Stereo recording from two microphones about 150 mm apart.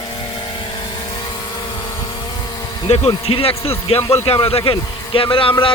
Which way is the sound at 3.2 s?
40° left (ahead or behind).